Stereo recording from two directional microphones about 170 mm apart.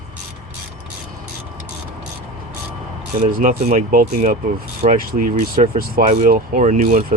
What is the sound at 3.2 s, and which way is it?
Speech, 55° right (ahead or behind).